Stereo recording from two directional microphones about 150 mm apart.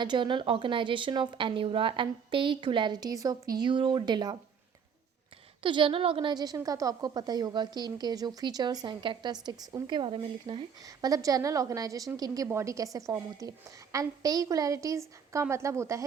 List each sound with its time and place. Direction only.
0.0 s speech: 30° right (ahead or behind)
5.6 s a woman's voice: 35° right (ahead or behind)
10.8 s a woman's voice: 25° right (ahead or behind)